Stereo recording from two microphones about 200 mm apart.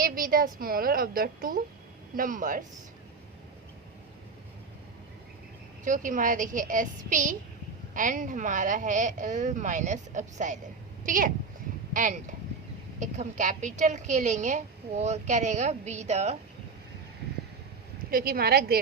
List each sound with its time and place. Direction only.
0.0 s a woman's voice: 45° right (ahead or behind)
5.8 s a woman's voice: 40° right (ahead or behind)
18.1 s a woman's voice: 50° right (ahead or behind)